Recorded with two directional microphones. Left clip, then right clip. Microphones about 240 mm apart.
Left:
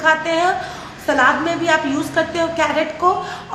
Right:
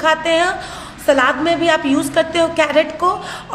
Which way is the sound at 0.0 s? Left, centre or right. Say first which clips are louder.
Right 1 dB; right.